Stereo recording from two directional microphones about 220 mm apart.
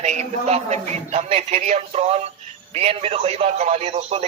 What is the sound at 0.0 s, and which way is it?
A man's voice, 30° right (ahead or behind).